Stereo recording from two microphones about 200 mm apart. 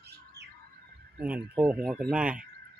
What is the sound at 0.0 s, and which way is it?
Bird, 55° right (ahead or behind).